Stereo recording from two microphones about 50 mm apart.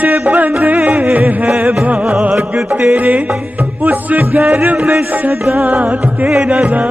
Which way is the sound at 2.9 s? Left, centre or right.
Right.